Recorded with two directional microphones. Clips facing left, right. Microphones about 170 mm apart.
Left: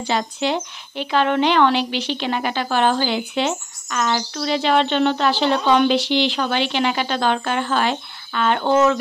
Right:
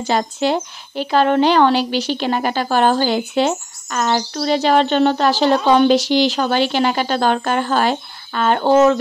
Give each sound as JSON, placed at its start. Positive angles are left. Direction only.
{"t": 0.0, "sound": "a woman's voice", "side_deg": -45}